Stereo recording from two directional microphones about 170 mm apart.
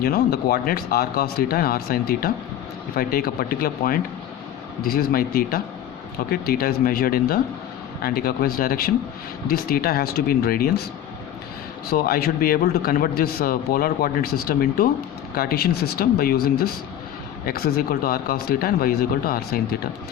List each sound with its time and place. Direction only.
0.0 s a man's voice: 65° left (ahead or behind)
11.9 s a man's voice: 60° left (ahead or behind)